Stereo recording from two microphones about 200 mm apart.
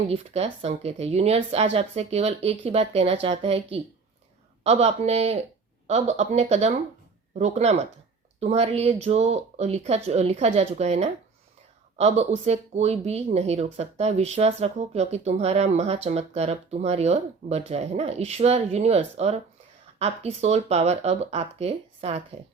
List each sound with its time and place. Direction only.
0.1 s speech: 30° right (ahead or behind)